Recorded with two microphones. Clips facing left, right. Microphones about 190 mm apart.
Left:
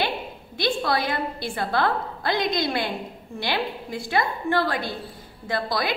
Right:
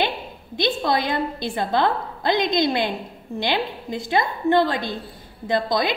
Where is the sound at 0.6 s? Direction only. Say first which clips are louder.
Right 2 dB; 20° right (ahead or behind).